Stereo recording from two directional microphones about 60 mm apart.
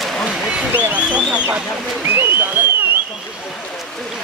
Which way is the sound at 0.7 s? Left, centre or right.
Right.